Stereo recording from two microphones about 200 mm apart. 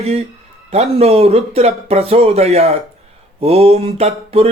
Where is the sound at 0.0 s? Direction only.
30° right (ahead or behind).